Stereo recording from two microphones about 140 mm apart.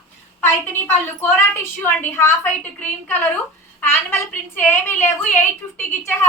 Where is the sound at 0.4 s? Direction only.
15° left (ahead or behind).